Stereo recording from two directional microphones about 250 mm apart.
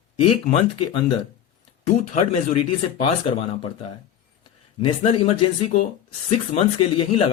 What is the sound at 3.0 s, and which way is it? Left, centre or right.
Speech, left.